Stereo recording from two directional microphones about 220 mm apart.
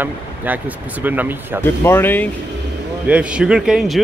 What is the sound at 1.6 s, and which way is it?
Speech, 10° left (ahead or behind).